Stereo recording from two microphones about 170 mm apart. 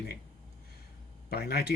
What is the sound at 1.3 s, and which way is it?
Speech, 65° left (ahead or behind).